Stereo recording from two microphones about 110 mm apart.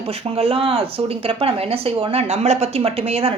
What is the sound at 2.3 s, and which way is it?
Speech, 75° right (ahead or behind).